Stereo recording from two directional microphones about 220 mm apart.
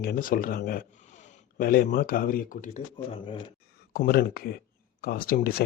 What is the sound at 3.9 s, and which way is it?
Speech, 45° left (ahead or behind).